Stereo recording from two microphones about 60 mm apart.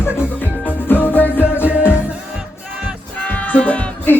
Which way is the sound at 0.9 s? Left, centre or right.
Left.